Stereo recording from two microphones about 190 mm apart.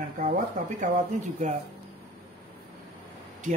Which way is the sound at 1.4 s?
40° right (ahead or behind).